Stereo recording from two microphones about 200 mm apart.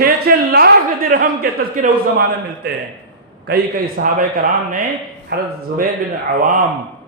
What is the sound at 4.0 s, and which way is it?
Speech, 50° right (ahead or behind).